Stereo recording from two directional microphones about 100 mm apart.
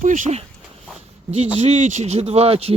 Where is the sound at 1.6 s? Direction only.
90° right.